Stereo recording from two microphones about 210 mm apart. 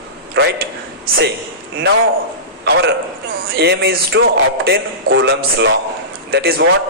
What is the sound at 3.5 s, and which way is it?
A man's voice, 50° right (ahead or behind).